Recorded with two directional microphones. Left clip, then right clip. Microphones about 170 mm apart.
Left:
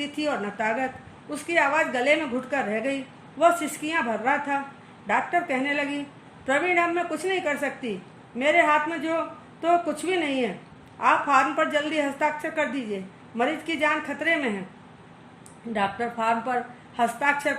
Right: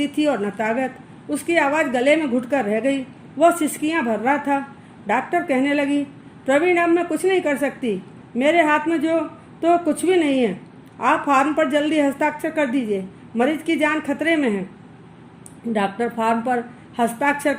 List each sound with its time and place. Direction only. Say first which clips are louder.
0.0 s a woman's voice: right 7 dB; 40° right (ahead or behind)
15.7 s a woman's voice: right 4 dB; 45° right (ahead or behind)